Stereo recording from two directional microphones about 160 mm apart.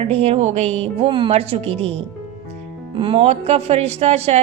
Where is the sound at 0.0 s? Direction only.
40° right (ahead or behind).